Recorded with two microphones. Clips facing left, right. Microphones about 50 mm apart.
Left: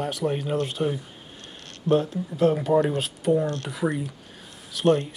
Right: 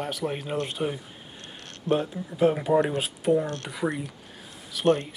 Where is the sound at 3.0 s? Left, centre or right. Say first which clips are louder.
Left 1 dB; centre.